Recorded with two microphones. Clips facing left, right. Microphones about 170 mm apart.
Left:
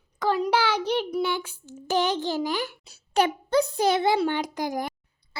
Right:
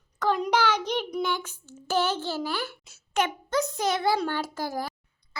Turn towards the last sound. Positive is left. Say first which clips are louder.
# left 3 dB
turn(degrees=15)  # may be behind; listen again after turning